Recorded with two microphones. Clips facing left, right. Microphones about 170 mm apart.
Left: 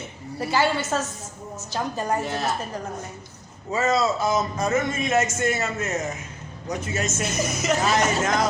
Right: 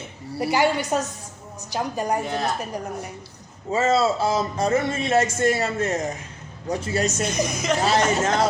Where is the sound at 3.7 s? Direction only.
30° right (ahead or behind).